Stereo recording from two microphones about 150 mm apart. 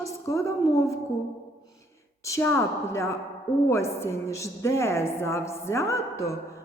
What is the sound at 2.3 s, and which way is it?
A woman's voice, 20° left (ahead or behind).